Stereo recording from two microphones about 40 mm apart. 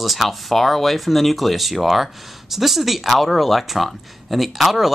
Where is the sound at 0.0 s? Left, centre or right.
Centre.